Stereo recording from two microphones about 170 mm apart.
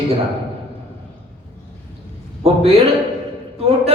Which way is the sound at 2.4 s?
35° right (ahead or behind).